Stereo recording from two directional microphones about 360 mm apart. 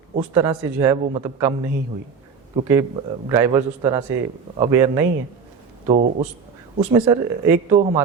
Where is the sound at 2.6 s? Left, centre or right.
Centre.